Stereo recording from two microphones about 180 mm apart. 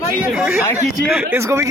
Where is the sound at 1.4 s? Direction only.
15° right (ahead or behind).